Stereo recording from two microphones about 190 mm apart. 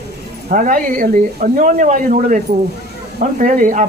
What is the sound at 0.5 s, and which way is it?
A man's voice, 45° right (ahead or behind).